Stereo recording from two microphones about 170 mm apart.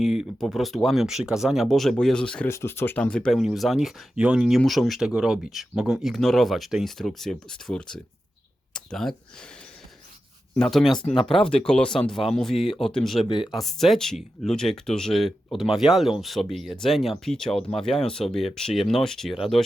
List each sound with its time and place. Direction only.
0.0 s speech: centre (ahead or behind)
8.7 s a sound: 5° left (ahead or behind)
10.6 s speech: centre (ahead or behind)
10.9 s speech: 25° left (ahead or behind)
11.3 s speech: 5° left (ahead or behind)
13.2 s speech: 30° left (ahead or behind)
13.5 s speech: centre (ahead or behind)